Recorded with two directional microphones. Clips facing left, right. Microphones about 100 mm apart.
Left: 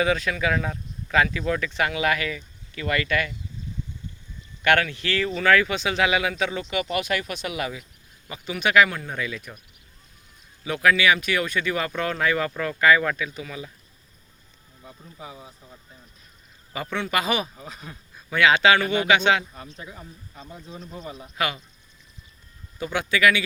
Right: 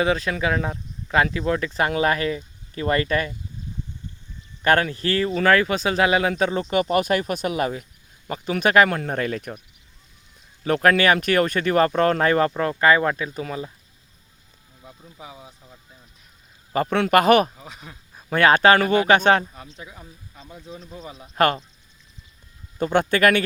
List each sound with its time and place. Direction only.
0.0 s speech: 30° right (ahead or behind)
4.6 s speech: 35° right (ahead or behind); by 9.6 s 50° right (ahead or behind)
10.6 s speech: 45° right (ahead or behind)
14.8 s speech: 10° right (ahead or behind)
16.7 s speech: 45° right (ahead or behind)
17.0 s speech: 55° right (ahead or behind)
17.6 s speech: 5° right (ahead or behind)
18.3 s speech: 45° right (ahead or behind)
19.5 s speech: centre (ahead or behind)
21.3 s speech: 45° right (ahead or behind)
22.8 s speech: 50° right (ahead or behind)